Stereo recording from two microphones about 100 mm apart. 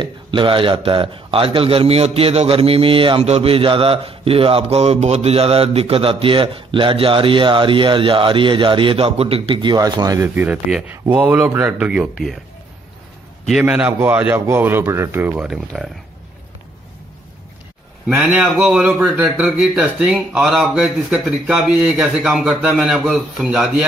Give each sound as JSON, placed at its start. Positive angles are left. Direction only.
{"t": 0.0, "sound": "a man's voice", "side_deg": -55}
{"t": 10.2, "sound": "a man's voice", "side_deg": -15}
{"t": 11.9, "sound": "a man's voice", "side_deg": -5}
{"t": 13.5, "sound": "speech", "side_deg": -5}
{"t": 13.7, "sound": "speech", "side_deg": -20}
{"t": 15.3, "sound": "a man's voice", "side_deg": -5}
{"t": 18.0, "sound": "speech", "side_deg": -5}
{"t": 18.9, "sound": "a man's voice", "side_deg": -15}